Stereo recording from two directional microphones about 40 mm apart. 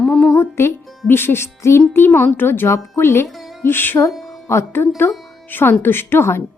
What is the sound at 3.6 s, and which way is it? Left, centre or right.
Speech, left.